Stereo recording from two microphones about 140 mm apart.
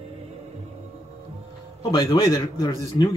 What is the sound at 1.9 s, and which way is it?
Speech, 30° left (ahead or behind).